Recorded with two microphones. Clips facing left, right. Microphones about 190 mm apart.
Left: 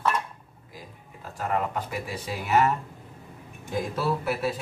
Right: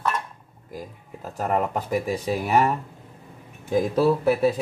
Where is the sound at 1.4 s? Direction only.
45° right (ahead or behind).